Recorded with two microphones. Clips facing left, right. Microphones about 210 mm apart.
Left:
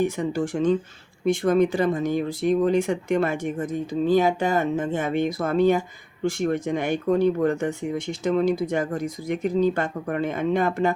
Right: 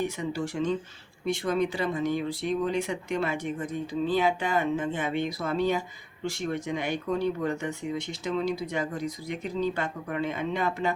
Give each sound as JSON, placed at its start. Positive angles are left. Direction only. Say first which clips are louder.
{"t": 0.2, "sound": "speech", "louder": "left 6 dB", "side_deg": 50}